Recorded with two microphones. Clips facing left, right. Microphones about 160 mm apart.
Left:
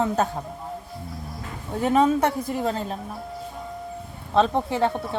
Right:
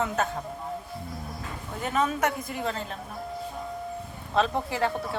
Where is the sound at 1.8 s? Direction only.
30° left (ahead or behind).